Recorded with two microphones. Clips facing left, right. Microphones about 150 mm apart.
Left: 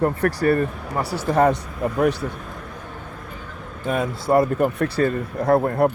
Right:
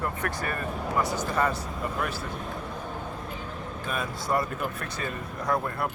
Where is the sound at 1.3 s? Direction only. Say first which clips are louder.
Left 14 dB; 50° left (ahead or behind).